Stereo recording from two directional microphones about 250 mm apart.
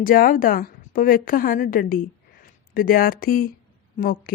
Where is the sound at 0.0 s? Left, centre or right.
Left.